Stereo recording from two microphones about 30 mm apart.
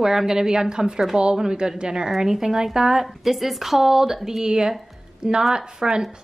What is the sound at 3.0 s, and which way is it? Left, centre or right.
A woman's voice, centre.